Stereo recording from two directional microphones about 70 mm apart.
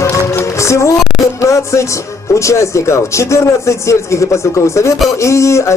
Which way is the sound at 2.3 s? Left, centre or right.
Left.